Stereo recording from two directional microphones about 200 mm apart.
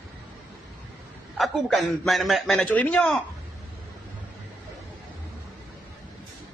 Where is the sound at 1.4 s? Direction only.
Centre (ahead or behind).